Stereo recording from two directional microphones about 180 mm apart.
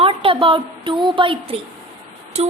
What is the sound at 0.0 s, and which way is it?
A woman's voice, 30° right (ahead or behind).